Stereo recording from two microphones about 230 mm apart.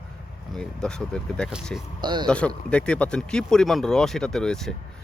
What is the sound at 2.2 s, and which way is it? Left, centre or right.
Speech, centre.